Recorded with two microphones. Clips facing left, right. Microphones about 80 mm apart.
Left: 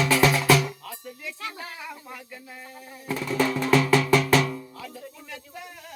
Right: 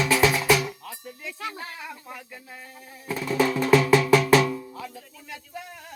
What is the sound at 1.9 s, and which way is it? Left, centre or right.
Snake, centre.